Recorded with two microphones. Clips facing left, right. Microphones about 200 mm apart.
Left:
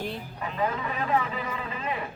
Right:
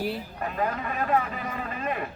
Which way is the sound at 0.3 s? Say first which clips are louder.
Left 3 dB; 50° right (ahead or behind).